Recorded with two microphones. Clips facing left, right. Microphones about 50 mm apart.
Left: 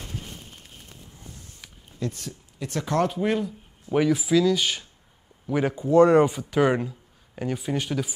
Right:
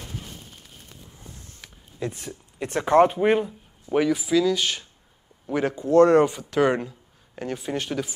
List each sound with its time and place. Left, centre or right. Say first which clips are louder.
1.6 s a sound: right 3 dB; centre
2.0 s speech: right 1 dB; right
3.9 s speech: even; centre